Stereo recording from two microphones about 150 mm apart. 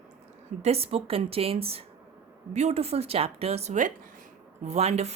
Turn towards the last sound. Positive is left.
turn(degrees=-45)  # may be behind; listen again after turning